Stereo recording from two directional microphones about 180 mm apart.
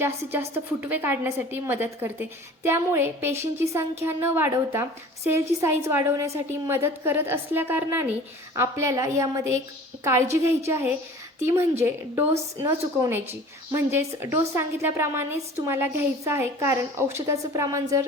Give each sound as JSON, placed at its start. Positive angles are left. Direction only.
{"t": 0.0, "sound": "a woman's voice", "side_deg": -10}